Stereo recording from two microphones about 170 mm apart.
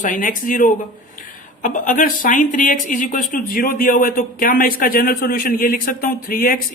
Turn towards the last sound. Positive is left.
turn(degrees=60)  # may be behind; listen again after turning